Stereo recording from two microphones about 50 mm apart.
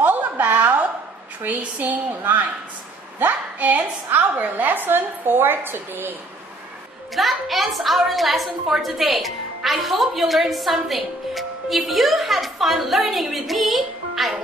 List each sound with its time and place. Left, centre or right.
0.0 s a sound: right
1.8 s a woman's voice: right
7.2 s a woman's voice: centre